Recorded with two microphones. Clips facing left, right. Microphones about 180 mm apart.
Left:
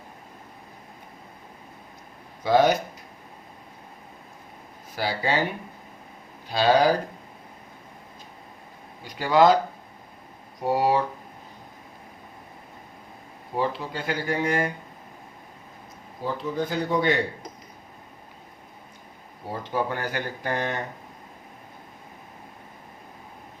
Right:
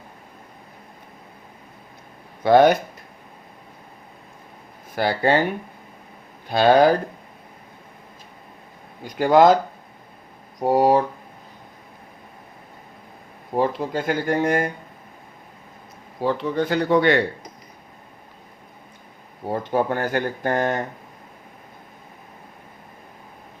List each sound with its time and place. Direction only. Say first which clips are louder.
2.4 s speech: right 5 dB; 60° right (ahead or behind)
4.9 s speech: right 7 dB; 55° right (ahead or behind)
6.5 s speech: right 5 dB; 55° right (ahead or behind)
9.0 s speech: right 4 dB; 50° right (ahead or behind)
10.6 s speech: right 5 dB; 45° right (ahead or behind)
13.6 s speech: right 5 dB; 50° right (ahead or behind)
16.2 s a man's voice: right 6 dB; 70° right (ahead or behind)
19.5 s speech: right 6 dB; 50° right (ahead or behind)